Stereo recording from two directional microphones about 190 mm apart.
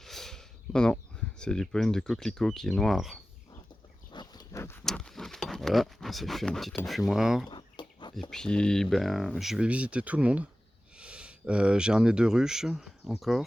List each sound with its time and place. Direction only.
0.0 s a sound: centre (ahead or behind)
1.4 s speech: 5° left (ahead or behind)
4.1 s a sound: 20° left (ahead or behind)
4.9 s speech: 5° left (ahead or behind)
7.5 s bird: 25° left (ahead or behind)
8.3 s speech: 5° left (ahead or behind)